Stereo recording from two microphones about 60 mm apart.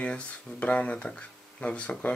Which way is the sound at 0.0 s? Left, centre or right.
Centre.